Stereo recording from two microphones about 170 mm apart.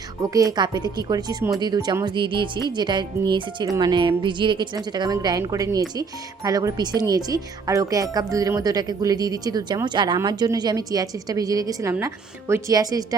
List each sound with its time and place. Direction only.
0.2 s speech: 20° right (ahead or behind)